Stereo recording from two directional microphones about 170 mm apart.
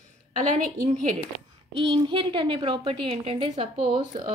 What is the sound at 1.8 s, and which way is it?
A woman's voice, 30° right (ahead or behind).